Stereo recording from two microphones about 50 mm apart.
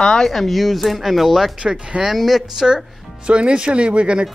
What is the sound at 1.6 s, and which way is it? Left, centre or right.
Speech, right.